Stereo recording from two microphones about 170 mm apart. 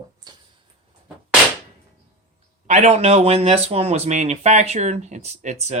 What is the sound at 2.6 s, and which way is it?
Speech, 40° right (ahead or behind).